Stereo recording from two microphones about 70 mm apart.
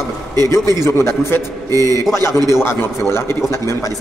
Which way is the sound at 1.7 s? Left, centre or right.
Right.